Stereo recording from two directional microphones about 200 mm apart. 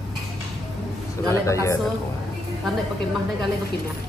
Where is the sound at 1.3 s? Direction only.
15° left (ahead or behind).